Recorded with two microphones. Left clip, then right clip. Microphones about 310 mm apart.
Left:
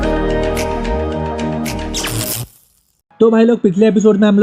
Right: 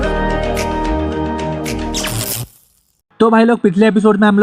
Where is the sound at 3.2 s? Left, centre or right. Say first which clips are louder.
Even; right.